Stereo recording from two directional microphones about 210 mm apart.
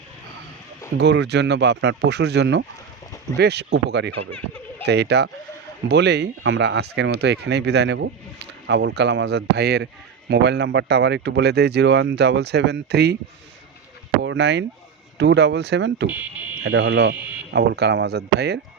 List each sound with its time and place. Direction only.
0.9 s speech: 55° right (ahead or behind)
14.2 s a sound: 55° right (ahead or behind)
15.2 s speech: 55° right (ahead or behind)